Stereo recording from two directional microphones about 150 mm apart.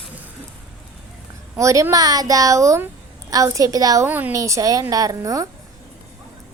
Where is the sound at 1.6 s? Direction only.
20° right (ahead or behind).